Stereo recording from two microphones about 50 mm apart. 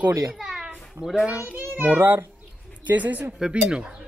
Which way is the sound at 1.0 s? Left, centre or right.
Centre.